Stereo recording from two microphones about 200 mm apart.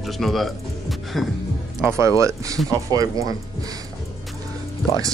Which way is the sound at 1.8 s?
15° right (ahead or behind).